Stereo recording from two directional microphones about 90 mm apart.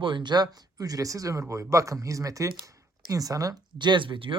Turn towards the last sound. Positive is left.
turn(degrees=-70)  # may be behind; listen again after turning